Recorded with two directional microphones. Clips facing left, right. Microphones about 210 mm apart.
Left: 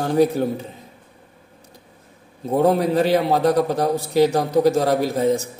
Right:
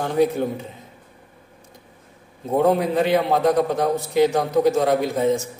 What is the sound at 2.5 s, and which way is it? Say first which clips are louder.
A man's voice: left 1 dB; 35° left (ahead or behind).